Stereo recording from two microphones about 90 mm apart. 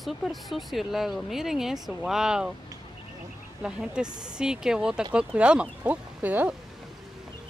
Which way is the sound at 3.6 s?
10° right (ahead or behind).